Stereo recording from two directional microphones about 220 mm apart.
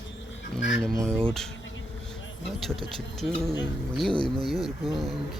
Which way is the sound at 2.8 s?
Centre (ahead or behind).